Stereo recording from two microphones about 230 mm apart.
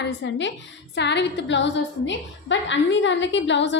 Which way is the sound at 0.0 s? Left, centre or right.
Left.